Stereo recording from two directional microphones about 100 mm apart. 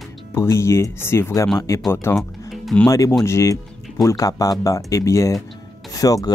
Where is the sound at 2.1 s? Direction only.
Centre (ahead or behind).